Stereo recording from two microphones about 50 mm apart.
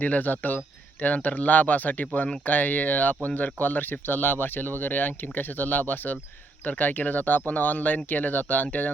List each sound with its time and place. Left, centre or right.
0.0 s speech: left